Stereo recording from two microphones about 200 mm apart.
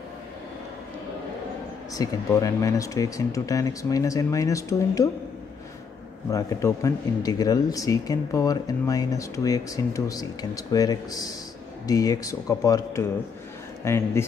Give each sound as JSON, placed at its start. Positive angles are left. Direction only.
{"t": 2.0, "sound": "speech", "side_deg": 15}
{"t": 6.3, "sound": "speech", "side_deg": 15}